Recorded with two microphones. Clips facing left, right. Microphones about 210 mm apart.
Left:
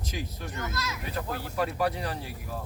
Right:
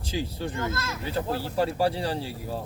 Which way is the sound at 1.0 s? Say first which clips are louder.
Right 8 dB; 30° right (ahead or behind).